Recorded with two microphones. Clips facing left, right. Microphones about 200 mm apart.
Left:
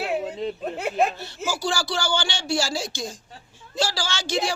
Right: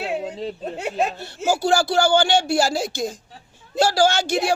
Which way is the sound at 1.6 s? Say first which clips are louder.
Right 9 dB; 55° right (ahead or behind).